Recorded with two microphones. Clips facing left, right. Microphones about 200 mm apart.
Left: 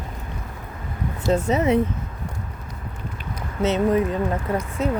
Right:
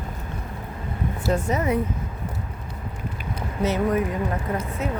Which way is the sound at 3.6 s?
25° left (ahead or behind).